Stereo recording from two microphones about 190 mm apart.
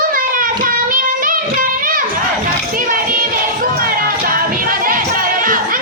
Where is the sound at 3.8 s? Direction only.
50° right (ahead or behind).